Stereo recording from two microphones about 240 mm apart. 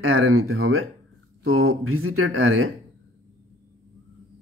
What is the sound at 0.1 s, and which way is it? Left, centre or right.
Speech, right.